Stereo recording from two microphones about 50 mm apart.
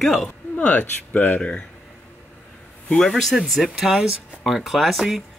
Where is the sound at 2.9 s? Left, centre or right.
Centre.